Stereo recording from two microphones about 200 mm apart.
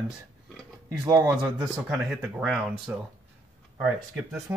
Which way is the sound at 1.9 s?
Centre (ahead or behind).